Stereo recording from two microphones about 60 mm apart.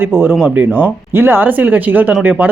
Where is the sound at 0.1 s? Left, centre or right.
Right.